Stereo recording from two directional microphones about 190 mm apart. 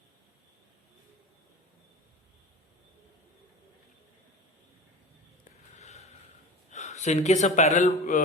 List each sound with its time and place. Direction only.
5.7 s sniff: 35° left (ahead or behind)
6.7 s speech: 40° left (ahead or behind)